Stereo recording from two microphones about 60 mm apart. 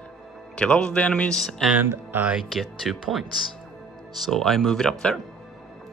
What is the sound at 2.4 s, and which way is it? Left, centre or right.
Speech, centre.